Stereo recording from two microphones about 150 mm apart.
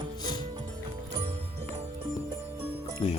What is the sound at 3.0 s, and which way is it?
Speech, 45° left (ahead or behind).